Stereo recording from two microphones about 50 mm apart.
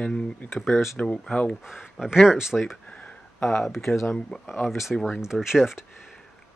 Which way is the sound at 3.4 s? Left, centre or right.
Centre.